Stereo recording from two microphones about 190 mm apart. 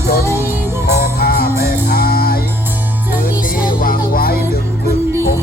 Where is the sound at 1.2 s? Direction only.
55° left (ahead or behind).